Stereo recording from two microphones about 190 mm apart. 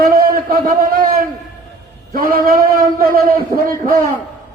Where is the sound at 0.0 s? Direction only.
50° right (ahead or behind).